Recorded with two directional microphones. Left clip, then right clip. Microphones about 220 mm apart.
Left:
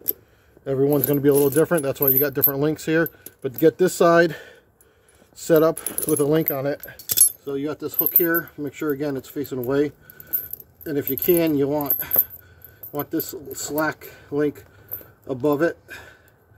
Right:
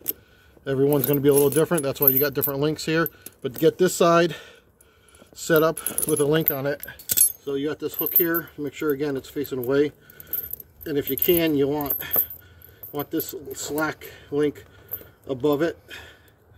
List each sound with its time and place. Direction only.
0.7 s speech: 5° left (ahead or behind)
12.9 s speech: 20° left (ahead or behind)